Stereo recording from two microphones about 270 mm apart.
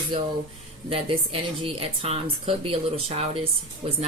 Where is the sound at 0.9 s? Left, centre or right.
Right.